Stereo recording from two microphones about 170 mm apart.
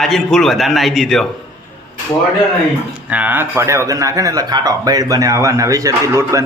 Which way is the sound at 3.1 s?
10° right (ahead or behind).